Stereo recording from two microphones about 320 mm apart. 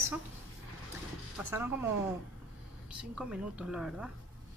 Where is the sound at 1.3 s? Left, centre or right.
Centre.